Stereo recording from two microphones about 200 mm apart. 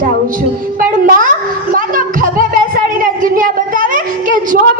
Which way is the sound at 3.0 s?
45° right (ahead or behind).